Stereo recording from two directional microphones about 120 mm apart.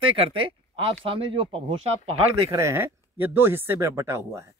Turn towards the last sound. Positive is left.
turn(degrees=-25)  # may be behind; listen again after turning